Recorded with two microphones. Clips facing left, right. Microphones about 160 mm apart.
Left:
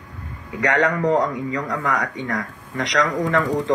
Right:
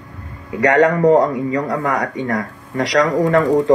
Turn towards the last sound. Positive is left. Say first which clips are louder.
# right 7 dB
turn(degrees=-40)  # may be behind; listen again after turning